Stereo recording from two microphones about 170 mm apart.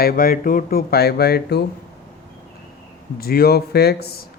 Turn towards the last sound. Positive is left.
turn(degrees=65)  # may be behind; listen again after turning